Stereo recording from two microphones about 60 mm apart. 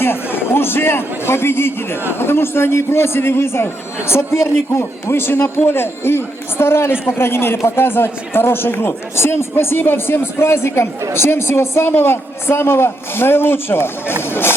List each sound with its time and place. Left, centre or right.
0.0 s a man's voice: left